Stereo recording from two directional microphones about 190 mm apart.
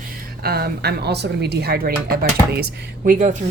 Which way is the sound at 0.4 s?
55° right (ahead or behind).